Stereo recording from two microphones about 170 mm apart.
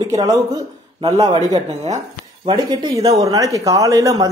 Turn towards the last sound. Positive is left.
turn(degrees=-20)  # may be behind; listen again after turning